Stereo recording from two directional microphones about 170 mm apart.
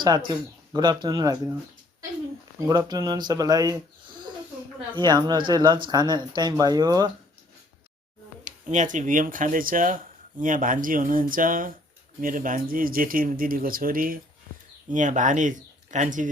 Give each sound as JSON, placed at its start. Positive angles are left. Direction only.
{"t": 0.3, "sound": "speech", "side_deg": -25}
{"t": 2.6, "sound": "speech", "side_deg": -20}
{"t": 8.4, "sound": "speech", "side_deg": -45}